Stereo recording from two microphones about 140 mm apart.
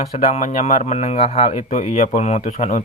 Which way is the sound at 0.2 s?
55° left (ahead or behind).